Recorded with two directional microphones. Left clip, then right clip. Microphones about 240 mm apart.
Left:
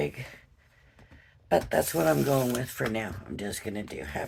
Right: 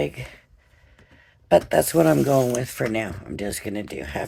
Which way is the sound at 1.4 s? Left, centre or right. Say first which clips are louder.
Right 8 dB; right.